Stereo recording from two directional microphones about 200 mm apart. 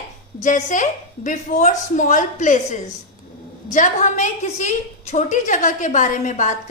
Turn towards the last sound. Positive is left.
turn(degrees=35)  # may be behind; listen again after turning